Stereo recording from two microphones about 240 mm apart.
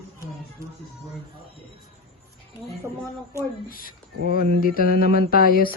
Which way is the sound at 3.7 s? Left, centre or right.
Left.